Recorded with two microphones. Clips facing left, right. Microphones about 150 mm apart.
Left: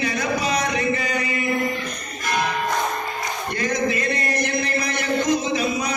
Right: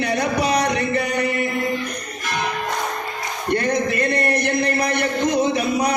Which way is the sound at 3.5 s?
60° right (ahead or behind).